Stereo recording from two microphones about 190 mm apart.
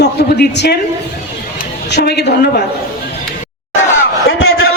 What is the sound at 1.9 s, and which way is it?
Speech, 60° left (ahead or behind).